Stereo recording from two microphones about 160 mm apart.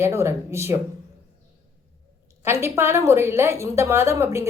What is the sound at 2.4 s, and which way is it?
A woman's voice, 15° right (ahead or behind).